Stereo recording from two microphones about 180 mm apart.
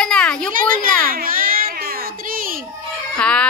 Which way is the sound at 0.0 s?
5° left (ahead or behind).